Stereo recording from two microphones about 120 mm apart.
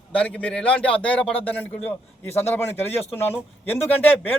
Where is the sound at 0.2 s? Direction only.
10° left (ahead or behind).